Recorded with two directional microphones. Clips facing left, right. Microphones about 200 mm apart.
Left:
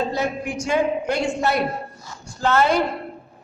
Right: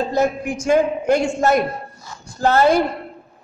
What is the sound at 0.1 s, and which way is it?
A woman's voice, 45° right (ahead or behind).